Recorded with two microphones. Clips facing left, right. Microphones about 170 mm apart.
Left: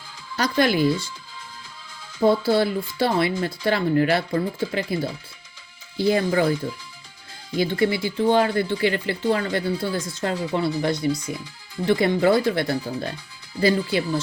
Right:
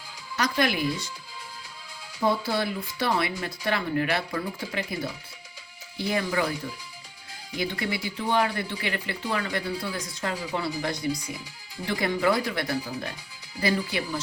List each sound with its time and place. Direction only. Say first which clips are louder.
0.3 s speech: left 5 dB; 30° left (ahead or behind)
2.2 s speech: left 7 dB; 30° left (ahead or behind)
6.0 s speech: left 7 dB; 35° left (ahead or behind)
7.5 s speech: left 8 dB; 30° left (ahead or behind)